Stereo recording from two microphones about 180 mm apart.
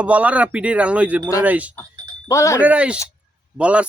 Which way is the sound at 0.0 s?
10° right (ahead or behind).